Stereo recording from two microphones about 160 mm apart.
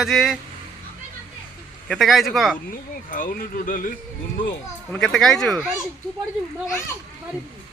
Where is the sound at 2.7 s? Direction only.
60° left (ahead or behind).